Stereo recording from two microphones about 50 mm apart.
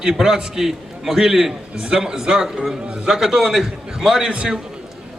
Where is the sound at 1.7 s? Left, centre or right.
Centre.